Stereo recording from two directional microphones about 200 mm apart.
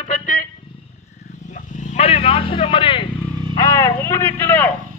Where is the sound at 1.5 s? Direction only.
40° left (ahead or behind).